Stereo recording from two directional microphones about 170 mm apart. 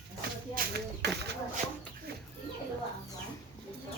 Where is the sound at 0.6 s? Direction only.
55° right (ahead or behind).